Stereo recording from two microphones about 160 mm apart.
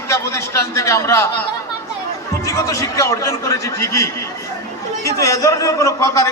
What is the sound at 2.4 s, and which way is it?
A man's voice, 20° left (ahead or behind).